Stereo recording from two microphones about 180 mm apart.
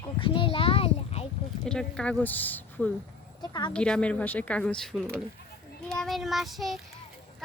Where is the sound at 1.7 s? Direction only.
5° left (ahead or behind).